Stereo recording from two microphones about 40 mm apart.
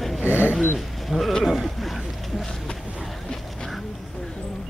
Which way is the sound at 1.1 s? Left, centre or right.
Centre.